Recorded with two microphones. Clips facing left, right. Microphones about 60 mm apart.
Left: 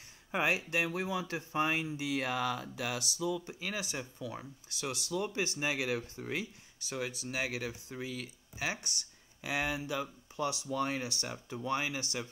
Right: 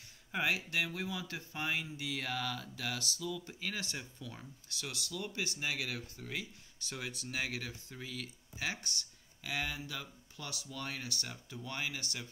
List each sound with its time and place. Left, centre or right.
0.3 s speech: left
6.9 s speech: centre; by 12.3 s left